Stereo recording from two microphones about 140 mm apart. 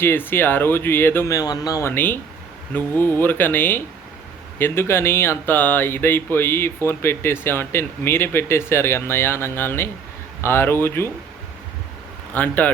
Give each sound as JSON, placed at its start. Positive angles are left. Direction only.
{"t": 0.0, "sound": "speech", "side_deg": 15}
{"t": 1.9, "sound": "speech", "side_deg": 15}
{"t": 12.3, "sound": "speech", "side_deg": 10}